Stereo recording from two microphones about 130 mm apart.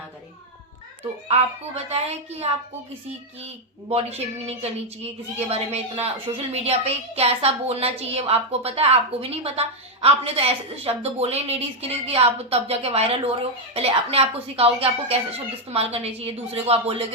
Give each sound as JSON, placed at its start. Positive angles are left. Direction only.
{"t": 1.3, "sound": "a woman's voice", "side_deg": -55}
{"t": 3.8, "sound": "a woman's voice", "side_deg": -55}